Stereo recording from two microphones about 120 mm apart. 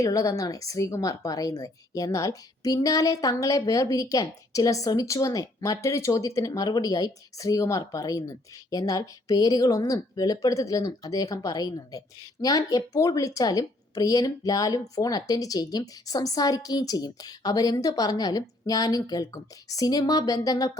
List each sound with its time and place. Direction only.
0.0 s speech: 25° left (ahead or behind)